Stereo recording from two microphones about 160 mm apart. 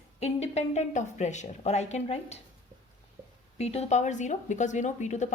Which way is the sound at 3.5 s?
40° left (ahead or behind).